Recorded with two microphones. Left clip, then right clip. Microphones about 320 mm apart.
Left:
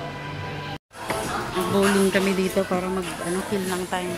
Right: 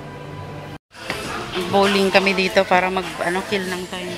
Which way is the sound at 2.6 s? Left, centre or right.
Right.